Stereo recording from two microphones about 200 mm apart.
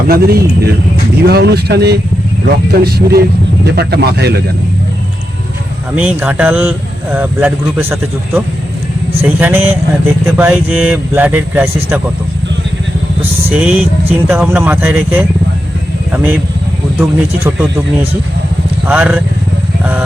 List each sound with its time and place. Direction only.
0.1 s speech: 50° right (ahead or behind)
6.0 s speech: 5° right (ahead or behind)
13.5 s speech: 5° right (ahead or behind)
18.9 s speech: 5° right (ahead or behind)
19.8 s vehicle: 10° right (ahead or behind)